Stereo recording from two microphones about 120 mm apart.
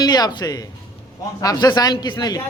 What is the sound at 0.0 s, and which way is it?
A man's voice, 35° left (ahead or behind).